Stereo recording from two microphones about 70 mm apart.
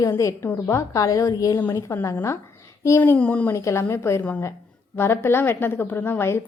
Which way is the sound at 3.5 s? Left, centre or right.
Left.